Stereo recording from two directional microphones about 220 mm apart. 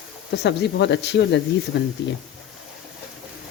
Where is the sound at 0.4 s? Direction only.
50° left (ahead or behind).